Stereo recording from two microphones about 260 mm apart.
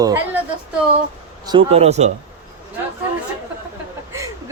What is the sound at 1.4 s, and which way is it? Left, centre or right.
Speech, right.